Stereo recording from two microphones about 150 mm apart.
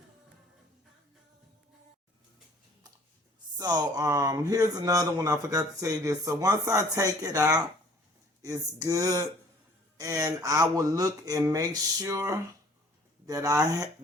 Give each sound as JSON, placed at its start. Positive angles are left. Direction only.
{"t": 3.6, "sound": "speech", "side_deg": -25}